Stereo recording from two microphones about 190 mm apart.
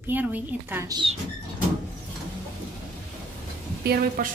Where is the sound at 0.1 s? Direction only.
10° right (ahead or behind).